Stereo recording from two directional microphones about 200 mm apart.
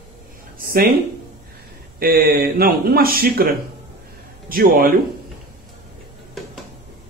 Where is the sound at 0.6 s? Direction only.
45° right (ahead or behind).